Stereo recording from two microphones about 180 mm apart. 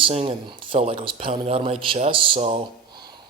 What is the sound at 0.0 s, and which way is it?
Speech, 35° right (ahead or behind).